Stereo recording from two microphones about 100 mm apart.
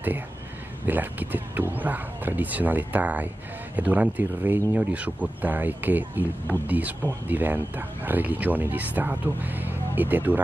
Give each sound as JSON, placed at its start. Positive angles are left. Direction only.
{"t": 0.8, "sound": "speech", "side_deg": -20}